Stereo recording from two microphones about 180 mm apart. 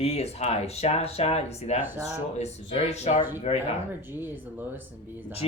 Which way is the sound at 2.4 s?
35° left (ahead or behind).